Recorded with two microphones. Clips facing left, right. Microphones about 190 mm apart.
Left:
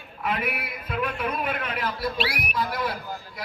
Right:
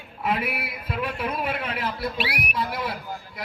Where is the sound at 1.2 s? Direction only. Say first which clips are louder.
Even; 30° right (ahead or behind).